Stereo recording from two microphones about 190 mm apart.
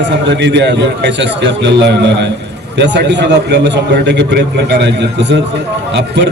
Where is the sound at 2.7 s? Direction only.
65° right (ahead or behind).